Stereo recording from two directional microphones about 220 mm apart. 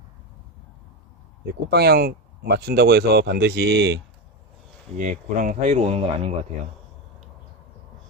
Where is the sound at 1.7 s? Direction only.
45° right (ahead or behind).